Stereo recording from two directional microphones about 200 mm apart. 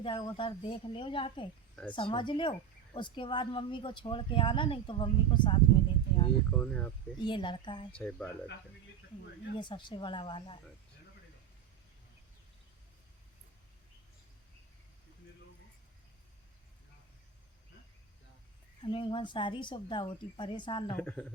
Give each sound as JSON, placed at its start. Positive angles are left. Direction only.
{"t": 0.0, "sound": "a woman's voice", "side_deg": 25}
{"t": 6.5, "sound": "speech", "side_deg": 5}
{"t": 7.3, "sound": "a woman's voice", "side_deg": 25}
{"t": 7.9, "sound": "speech", "side_deg": 5}
{"t": 9.6, "sound": "a woman's voice", "side_deg": 25}
{"t": 18.8, "sound": "a woman's voice", "side_deg": 25}
{"t": 21.0, "sound": "speech", "side_deg": 5}